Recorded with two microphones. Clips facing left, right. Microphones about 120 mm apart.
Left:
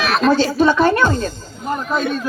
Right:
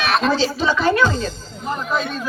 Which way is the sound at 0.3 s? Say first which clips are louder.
Left 5 dB; 55° left (ahead or behind).